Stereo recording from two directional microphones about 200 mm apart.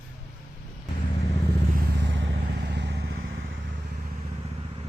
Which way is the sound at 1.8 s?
60° right (ahead or behind).